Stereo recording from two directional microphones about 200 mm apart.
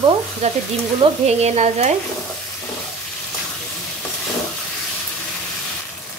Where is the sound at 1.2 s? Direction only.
35° right (ahead or behind).